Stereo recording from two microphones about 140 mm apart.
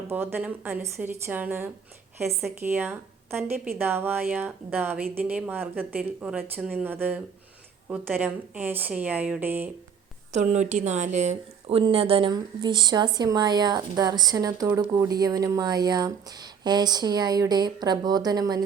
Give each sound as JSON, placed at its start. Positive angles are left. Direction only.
{"t": 0.1, "sound": "a woman's voice", "side_deg": -15}
{"t": 8.2, "sound": "a woman's voice", "side_deg": -15}
{"t": 10.3, "sound": "a woman's voice", "side_deg": -55}
{"t": 11.8, "sound": "speech", "side_deg": -40}